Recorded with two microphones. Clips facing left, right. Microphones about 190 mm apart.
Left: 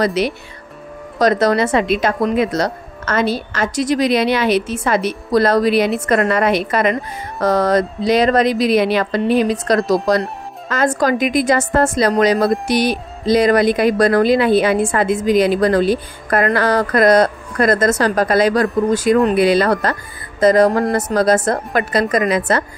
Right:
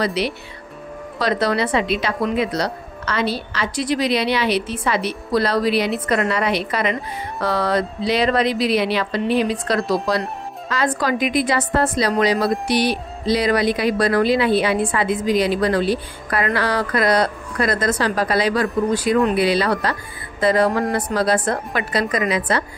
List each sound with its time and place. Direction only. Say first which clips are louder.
0.0 s speech: left 4 dB; 45° left (ahead or behind)